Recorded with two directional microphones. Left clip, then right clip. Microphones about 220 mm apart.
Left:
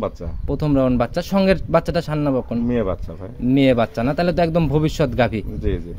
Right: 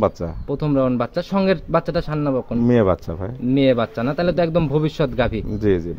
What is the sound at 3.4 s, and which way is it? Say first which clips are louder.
Speech: left 1 dB; 10° left (ahead or behind).